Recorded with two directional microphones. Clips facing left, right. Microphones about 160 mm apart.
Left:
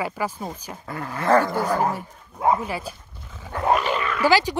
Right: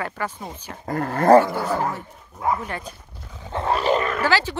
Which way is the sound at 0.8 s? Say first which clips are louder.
Right 7 dB; 45° right (ahead or behind).